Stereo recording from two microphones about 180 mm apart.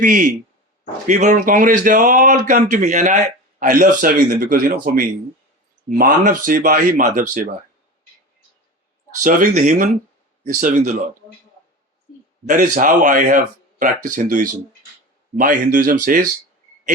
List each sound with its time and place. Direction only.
0.0 s speech: 45° right (ahead or behind)
9.2 s speech: 45° right (ahead or behind)
12.5 s speech: 45° right (ahead or behind)